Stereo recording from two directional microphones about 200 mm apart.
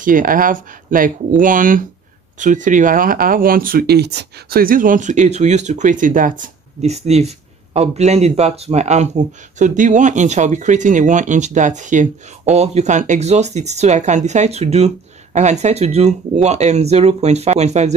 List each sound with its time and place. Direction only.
0.0 s speech: 45° right (ahead or behind)